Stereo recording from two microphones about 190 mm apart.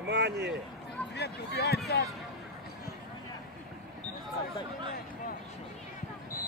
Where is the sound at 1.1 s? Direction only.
60° left (ahead or behind).